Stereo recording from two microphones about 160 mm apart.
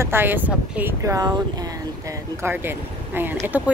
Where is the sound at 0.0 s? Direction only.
15° right (ahead or behind).